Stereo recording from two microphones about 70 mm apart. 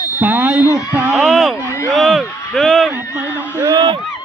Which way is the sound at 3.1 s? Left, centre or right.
Right.